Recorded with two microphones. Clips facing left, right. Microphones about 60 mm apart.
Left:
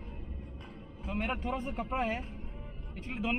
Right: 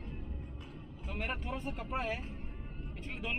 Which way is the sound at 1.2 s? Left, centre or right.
Centre.